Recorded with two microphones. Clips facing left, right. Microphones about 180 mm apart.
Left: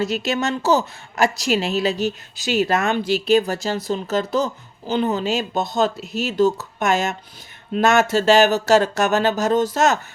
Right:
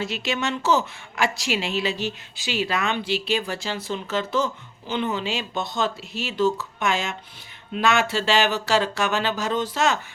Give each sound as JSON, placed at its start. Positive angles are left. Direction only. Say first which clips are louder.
{"t": 0.0, "sound": "a woman's voice", "louder": "left 5 dB", "side_deg": 40}